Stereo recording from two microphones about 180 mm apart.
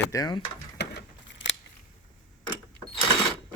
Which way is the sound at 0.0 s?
20° left (ahead or behind).